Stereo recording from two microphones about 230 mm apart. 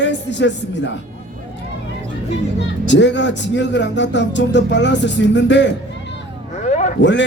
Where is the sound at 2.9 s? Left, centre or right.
Left.